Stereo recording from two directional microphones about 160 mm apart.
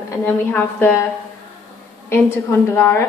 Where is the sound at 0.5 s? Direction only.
15° left (ahead or behind).